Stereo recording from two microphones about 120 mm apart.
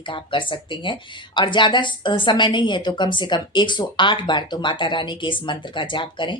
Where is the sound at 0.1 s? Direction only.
45° left (ahead or behind).